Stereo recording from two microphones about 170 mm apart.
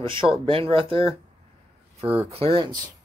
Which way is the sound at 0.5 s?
30° right (ahead or behind).